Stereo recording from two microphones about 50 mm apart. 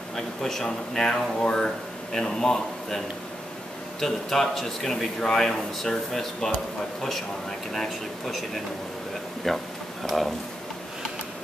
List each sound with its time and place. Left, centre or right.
0.1 s a man's voice: centre
4.0 s a man's voice: centre
7.7 s a man's voice: centre
9.5 s a man's voice: centre